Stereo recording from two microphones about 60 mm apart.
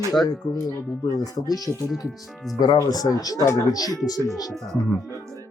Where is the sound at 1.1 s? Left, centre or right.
Left.